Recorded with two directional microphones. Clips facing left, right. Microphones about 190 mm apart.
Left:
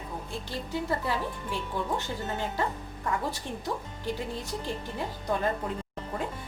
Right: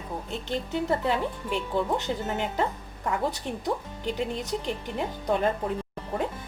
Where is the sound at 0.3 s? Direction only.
20° right (ahead or behind).